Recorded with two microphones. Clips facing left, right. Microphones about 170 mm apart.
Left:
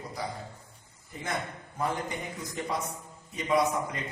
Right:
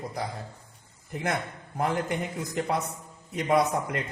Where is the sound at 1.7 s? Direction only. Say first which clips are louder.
Right 4 dB; 65° right (ahead or behind).